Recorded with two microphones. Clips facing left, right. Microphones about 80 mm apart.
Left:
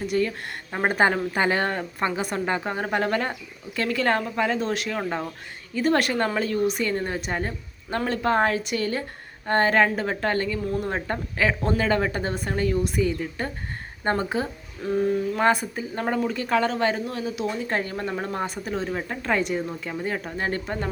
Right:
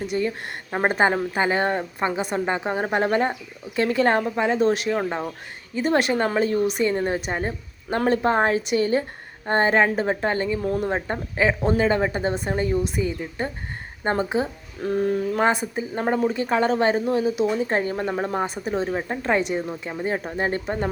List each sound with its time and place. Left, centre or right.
0.2 s a woman's voice: centre
5.0 s a woman's voice: centre
6.2 s a woman's voice: right
10.6 s a sound: right
10.8 s a woman's voice: centre
14.8 s a sound: right
15.7 s a woman's voice: right
18.4 s a woman's voice: centre
18.7 s a woman's voice: right
19.5 s a woman's voice: centre
19.8 s a woman's voice: right